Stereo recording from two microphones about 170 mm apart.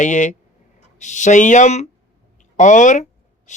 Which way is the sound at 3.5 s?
45° left (ahead or behind).